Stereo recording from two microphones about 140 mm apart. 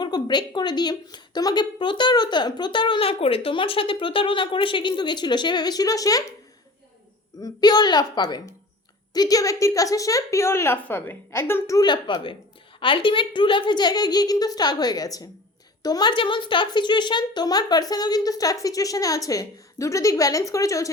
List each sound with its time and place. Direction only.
0.0 s a woman's voice: 30° left (ahead or behind)
7.3 s a woman's voice: 30° left (ahead or behind)